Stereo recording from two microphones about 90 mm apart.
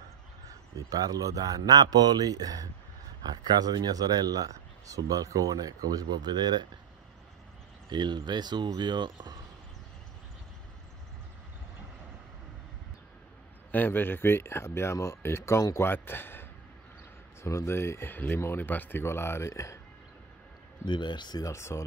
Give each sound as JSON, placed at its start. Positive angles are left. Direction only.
{"t": 0.8, "sound": "speech", "side_deg": -45}
{"t": 7.9, "sound": "speech", "side_deg": -55}
{"t": 13.7, "sound": "speech", "side_deg": 20}
{"t": 20.8, "sound": "speech", "side_deg": 60}
{"t": 21.5, "sound": "speech", "side_deg": 30}